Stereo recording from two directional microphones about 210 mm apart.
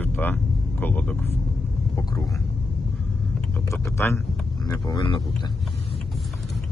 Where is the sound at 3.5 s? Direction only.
10° left (ahead or behind).